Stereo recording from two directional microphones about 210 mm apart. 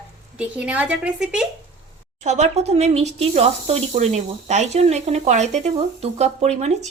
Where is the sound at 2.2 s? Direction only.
35° right (ahead or behind).